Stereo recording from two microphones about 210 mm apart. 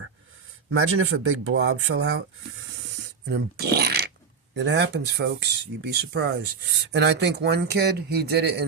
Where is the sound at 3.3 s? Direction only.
50° right (ahead or behind).